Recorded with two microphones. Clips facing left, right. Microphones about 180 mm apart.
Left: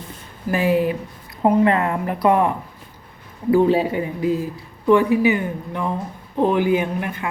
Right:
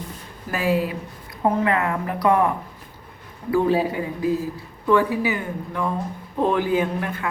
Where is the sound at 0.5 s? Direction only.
25° left (ahead or behind).